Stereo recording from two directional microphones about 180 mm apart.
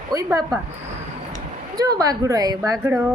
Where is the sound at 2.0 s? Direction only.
20° right (ahead or behind).